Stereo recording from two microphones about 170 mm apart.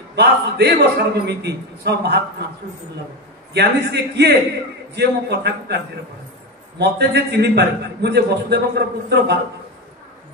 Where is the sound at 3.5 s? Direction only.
75° right (ahead or behind).